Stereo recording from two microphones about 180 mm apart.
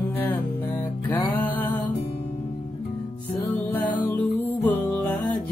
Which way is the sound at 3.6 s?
10° left (ahead or behind).